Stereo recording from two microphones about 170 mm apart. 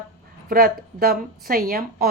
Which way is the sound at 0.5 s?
60° right (ahead or behind).